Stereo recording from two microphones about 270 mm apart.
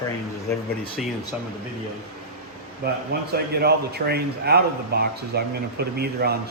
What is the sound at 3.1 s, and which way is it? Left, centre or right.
A man's voice, right.